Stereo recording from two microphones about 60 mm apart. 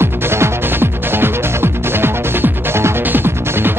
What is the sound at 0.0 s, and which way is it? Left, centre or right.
Music, right.